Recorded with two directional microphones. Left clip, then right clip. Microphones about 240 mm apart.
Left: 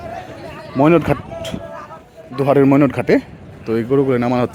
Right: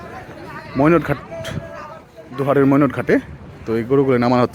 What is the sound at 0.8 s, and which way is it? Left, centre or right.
A man's voice, centre.